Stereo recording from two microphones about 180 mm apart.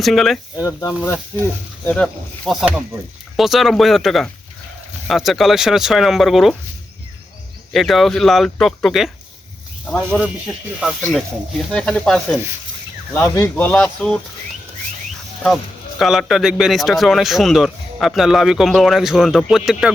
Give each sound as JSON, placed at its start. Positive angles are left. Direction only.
{"t": 0.0, "sound": "a man's voice", "side_deg": 0}
{"t": 0.5, "sound": "speech", "side_deg": 20}
{"t": 1.9, "sound": "a man's voice", "side_deg": 5}
{"t": 7.7, "sound": "a man's voice", "side_deg": 0}
{"t": 10.1, "sound": "a man's voice", "side_deg": -5}
{"t": 13.1, "sound": "speech", "side_deg": 15}
{"t": 16.0, "sound": "a man's voice", "side_deg": 0}